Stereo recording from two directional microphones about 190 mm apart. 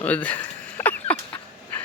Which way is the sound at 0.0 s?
10° left (ahead or behind).